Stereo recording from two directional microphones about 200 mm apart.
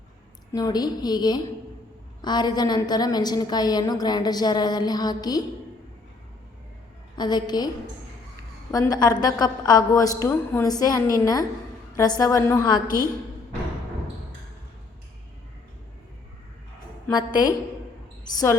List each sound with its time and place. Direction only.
0.5 s a woman's voice: 20° left (ahead or behind)
7.2 s a woman's voice: 20° left (ahead or behind)
8.7 s a woman's voice: 20° left (ahead or behind)
17.1 s a woman's voice: 20° left (ahead or behind)